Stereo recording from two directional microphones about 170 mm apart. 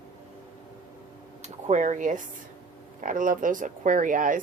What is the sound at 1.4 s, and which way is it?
Speech, 45° right (ahead or behind).